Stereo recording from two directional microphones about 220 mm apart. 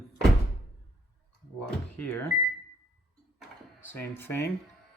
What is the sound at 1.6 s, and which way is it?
Speech, 10° left (ahead or behind).